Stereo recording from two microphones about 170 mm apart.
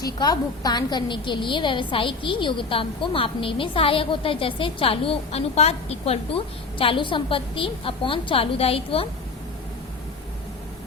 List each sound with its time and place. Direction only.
0.0 s a woman's voice: 25° left (ahead or behind)